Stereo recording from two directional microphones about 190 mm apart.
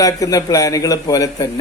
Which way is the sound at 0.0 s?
20° left (ahead or behind).